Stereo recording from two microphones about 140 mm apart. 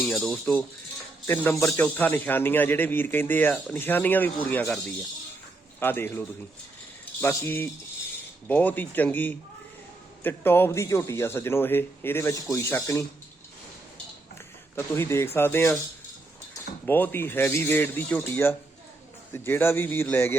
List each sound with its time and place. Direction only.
0.0 s speech: centre (ahead or behind)
1.3 s a man's voice: 15° left (ahead or behind)
5.8 s a man's voice: 15° left (ahead or behind)
14.8 s a man's voice: 15° left (ahead or behind)
16.8 s a man's voice: 15° left (ahead or behind)